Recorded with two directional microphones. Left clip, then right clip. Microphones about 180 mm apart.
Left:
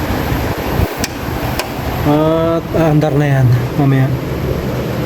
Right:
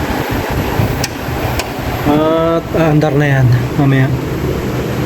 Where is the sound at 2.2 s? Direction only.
15° left (ahead or behind).